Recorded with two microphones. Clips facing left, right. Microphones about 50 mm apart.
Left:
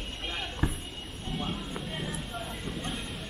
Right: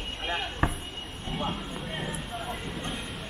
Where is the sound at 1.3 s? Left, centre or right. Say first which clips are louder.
Right 2 dB; right.